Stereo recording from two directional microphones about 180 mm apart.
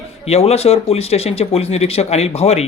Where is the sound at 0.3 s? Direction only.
35° left (ahead or behind).